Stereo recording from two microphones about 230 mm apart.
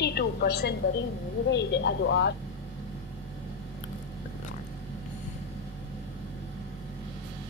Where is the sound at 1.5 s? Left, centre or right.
Left.